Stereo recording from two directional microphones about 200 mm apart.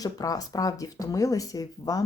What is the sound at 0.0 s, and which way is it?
Speech, 20° left (ahead or behind).